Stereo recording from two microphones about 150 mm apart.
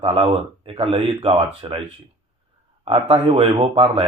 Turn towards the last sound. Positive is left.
turn(degrees=-40)  # may be behind; listen again after turning